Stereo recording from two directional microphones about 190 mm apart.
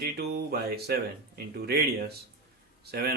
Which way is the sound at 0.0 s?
55° right (ahead or behind).